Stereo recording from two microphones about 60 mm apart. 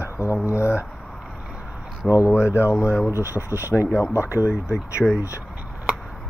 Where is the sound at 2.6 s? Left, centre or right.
Left.